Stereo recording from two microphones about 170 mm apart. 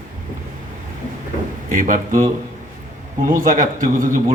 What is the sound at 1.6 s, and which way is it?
A man's voice, 50° right (ahead or behind).